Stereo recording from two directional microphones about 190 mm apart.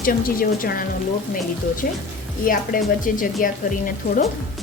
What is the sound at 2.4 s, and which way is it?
A woman's voice, 45° left (ahead or behind).